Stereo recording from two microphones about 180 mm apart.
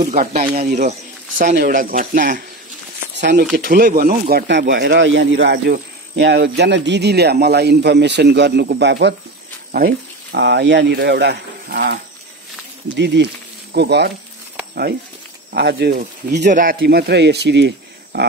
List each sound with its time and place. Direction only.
0.0 s speech: 50° right (ahead or behind)
3.2 s speech: 70° right (ahead or behind)
3.5 s speech: 55° right (ahead or behind); by 9.1 s 75° right (ahead or behind)
9.7 s speech: 55° right (ahead or behind)
15.5 s speech: 65° right (ahead or behind)
16.0 s speech: 45° right (ahead or behind)
16.8 s speech: 65° right (ahead or behind)